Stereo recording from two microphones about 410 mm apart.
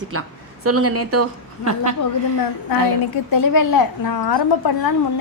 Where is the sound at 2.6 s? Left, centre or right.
Left.